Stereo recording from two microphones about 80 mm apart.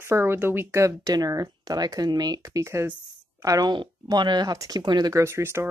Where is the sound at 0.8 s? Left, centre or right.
Right.